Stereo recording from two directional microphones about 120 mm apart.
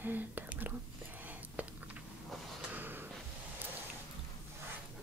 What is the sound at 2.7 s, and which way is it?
Snort, 15° right (ahead or behind).